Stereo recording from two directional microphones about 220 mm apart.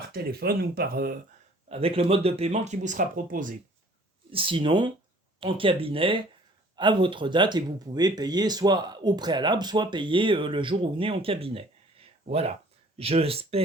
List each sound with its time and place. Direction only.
0.1 s speech: 45° right (ahead or behind)
1.7 s speech: 25° right (ahead or behind)
4.3 s speech: 25° right (ahead or behind)